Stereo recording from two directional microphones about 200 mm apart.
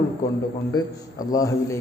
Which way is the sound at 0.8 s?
20° left (ahead or behind).